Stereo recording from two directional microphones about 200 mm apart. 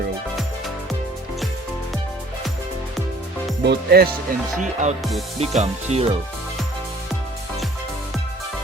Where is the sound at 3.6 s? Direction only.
55° right (ahead or behind).